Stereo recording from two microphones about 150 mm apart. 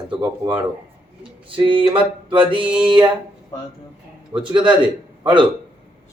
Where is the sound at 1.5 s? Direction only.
35° right (ahead or behind).